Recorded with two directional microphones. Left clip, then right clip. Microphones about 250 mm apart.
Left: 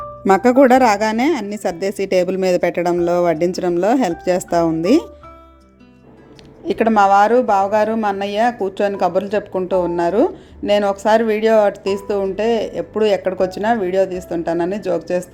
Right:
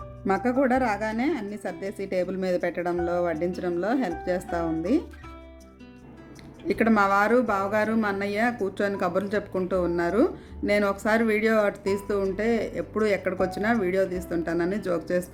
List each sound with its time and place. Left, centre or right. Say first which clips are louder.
0.3 s a woman's voice: left 12 dB; left
6.8 s a woman's voice: left 10 dB; centre